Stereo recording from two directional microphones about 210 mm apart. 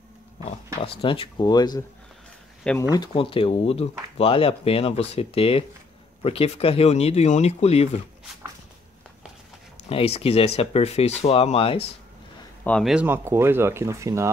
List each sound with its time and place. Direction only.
0.8 s speech: 25° left (ahead or behind)
2.9 s speech: 20° left (ahead or behind)
9.8 s speech: 30° left (ahead or behind)
12.6 s speech: centre (ahead or behind); by 14.3 s 15° right (ahead or behind)